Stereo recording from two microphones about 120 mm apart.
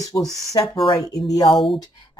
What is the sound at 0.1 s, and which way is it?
Speech, 25° left (ahead or behind).